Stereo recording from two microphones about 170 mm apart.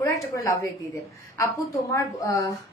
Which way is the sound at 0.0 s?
15° left (ahead or behind).